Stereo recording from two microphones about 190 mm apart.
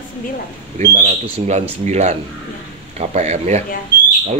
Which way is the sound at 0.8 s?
40° right (ahead or behind).